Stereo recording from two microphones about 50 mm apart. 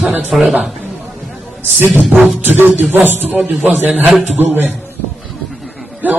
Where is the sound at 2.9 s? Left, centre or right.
Right.